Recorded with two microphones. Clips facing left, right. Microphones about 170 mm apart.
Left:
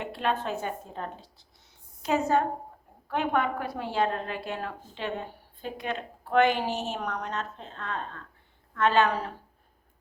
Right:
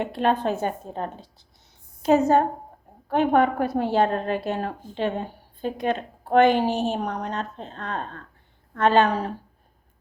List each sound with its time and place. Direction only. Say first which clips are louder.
0.0 s a woman's voice: right 7 dB; 40° right (ahead or behind)